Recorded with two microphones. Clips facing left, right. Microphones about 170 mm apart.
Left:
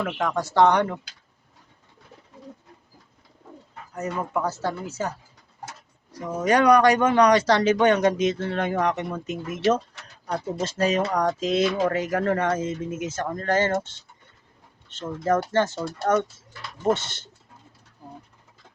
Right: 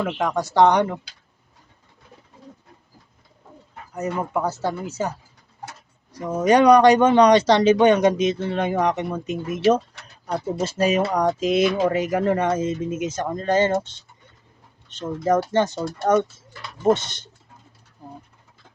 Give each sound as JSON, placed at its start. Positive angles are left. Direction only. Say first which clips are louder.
{"t": 0.0, "sound": "speech", "louder": "right 3 dB", "side_deg": -15}
{"t": 3.9, "sound": "speech", "louder": "right 3 dB", "side_deg": -20}
{"t": 6.2, "sound": "speech", "louder": "right 4 dB", "side_deg": -20}